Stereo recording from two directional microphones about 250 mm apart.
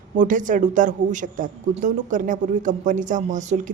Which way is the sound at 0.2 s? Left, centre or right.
Right.